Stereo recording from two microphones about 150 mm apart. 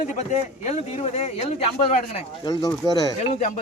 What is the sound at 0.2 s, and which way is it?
Speech, 50° left (ahead or behind).